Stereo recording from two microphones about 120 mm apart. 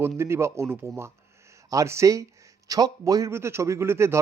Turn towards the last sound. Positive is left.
turn(degrees=-20)  # may be behind; listen again after turning